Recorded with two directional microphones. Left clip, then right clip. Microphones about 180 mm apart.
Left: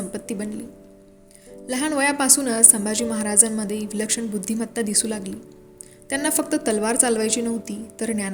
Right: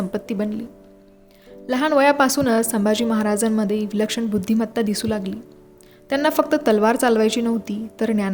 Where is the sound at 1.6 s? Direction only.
40° right (ahead or behind).